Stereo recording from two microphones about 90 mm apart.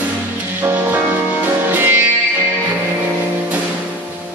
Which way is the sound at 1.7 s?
20° right (ahead or behind).